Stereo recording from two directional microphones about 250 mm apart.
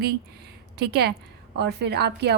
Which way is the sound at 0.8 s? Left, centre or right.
Right.